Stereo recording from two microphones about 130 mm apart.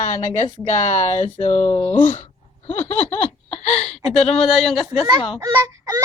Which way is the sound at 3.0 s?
60° left (ahead or behind).